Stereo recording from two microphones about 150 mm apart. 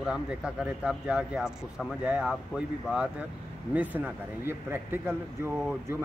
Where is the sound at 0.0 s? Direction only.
5° right (ahead or behind).